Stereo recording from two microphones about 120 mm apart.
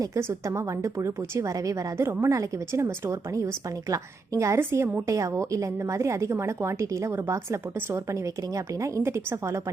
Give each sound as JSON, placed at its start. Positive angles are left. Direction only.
{"t": 0.0, "sound": "a woman's voice", "side_deg": -25}